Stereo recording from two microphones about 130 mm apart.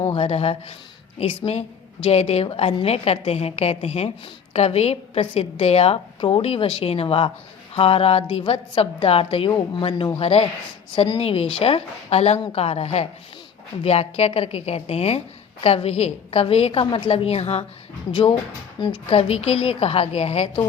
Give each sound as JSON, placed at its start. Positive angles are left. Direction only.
{"t": 0.0, "sound": "a woman's voice", "side_deg": 50}
{"t": 2.0, "sound": "a woman's voice", "side_deg": 50}
{"t": 18.1, "sound": "a woman's voice", "side_deg": 40}